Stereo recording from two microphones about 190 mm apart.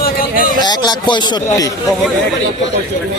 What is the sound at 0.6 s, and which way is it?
Speech, 20° left (ahead or behind).